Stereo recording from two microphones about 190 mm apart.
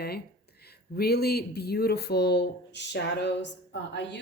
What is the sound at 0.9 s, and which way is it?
Speech, 55° left (ahead or behind).